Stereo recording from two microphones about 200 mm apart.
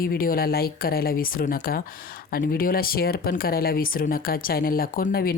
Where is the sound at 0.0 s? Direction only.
45° left (ahead or behind).